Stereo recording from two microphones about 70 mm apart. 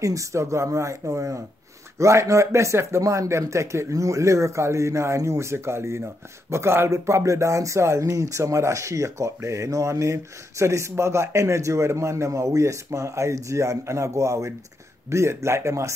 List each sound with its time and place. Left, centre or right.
0.0 s speech: right